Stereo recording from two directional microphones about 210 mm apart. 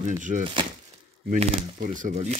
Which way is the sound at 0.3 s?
35° right (ahead or behind).